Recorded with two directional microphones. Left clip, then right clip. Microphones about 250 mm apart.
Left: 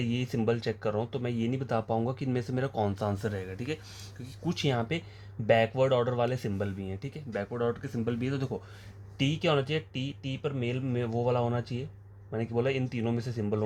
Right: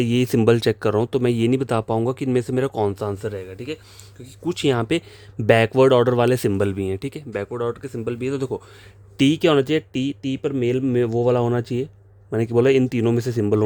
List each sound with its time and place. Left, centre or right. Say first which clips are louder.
0.0 s speech: right 13 dB; right
4.4 s speech: right 10 dB; right
9.1 s speech: right 11 dB; right